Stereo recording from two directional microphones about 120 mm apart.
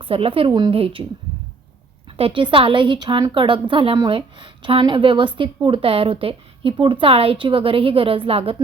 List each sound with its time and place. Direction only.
0.0 s speech: 50° right (ahead or behind)
2.1 s speech: 50° right (ahead or behind)